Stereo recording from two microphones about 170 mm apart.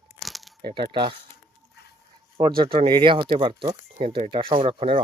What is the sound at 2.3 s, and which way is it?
Speech, 25° right (ahead or behind).